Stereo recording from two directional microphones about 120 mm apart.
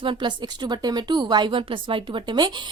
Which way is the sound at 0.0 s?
45° right (ahead or behind).